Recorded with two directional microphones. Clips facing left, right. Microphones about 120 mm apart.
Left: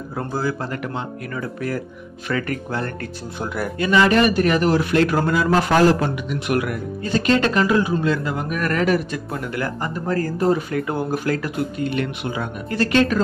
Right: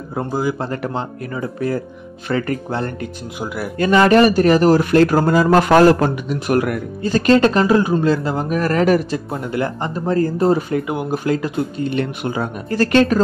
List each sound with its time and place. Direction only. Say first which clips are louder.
0.1 s speech: right 4 dB; 20° right (ahead or behind)
0.7 s speech: right 4 dB; 35° right (ahead or behind)
1.3 s speech: right 5 dB; 25° right (ahead or behind)
3.3 s speech: even; 5° right (ahead or behind)
3.7 s speech: right 5 dB; 45° right (ahead or behind)
5.5 s a man's voice: right 5 dB; 55° right (ahead or behind); by 9.0 s 35° right (ahead or behind)
9.1 s speech: right 4 dB; 25° right (ahead or behind)
10.9 s speech: right 2 dB; 15° right (ahead or behind); by 13.2 s 40° right (ahead or behind)